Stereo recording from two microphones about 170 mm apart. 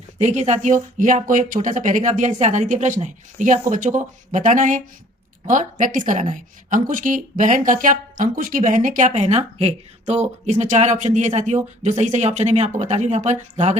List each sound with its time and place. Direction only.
0.2 s a woman's voice: 45° right (ahead or behind)